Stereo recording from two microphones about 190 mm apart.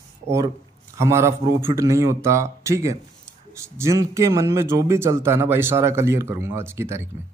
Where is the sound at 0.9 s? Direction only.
15° right (ahead or behind).